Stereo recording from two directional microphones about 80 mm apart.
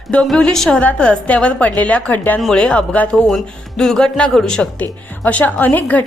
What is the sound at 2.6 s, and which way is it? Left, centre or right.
A woman's voice, centre.